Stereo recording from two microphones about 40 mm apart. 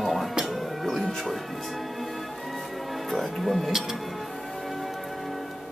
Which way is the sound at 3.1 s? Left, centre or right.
Centre.